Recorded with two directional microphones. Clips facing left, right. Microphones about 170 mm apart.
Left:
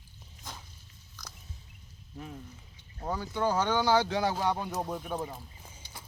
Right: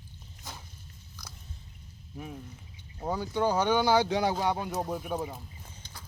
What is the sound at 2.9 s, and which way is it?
Speech, 15° right (ahead or behind).